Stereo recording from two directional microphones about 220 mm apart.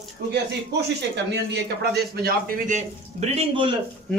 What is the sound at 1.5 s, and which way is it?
A man's voice, 50° right (ahead or behind).